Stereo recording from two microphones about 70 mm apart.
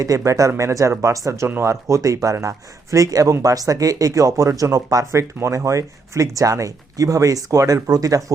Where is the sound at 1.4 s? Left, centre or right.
Right.